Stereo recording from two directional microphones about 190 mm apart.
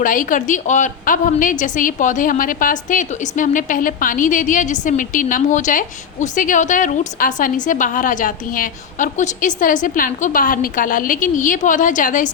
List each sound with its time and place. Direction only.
0.0 s a woman's voice: 45° left (ahead or behind)